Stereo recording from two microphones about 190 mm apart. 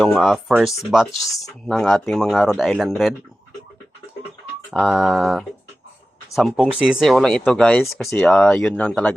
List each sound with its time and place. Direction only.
0.0 s speech: centre (ahead or behind)
1.3 s speech: 20° left (ahead or behind)
1.6 s speech: centre (ahead or behind)
4.7 s speech: 5° right (ahead or behind)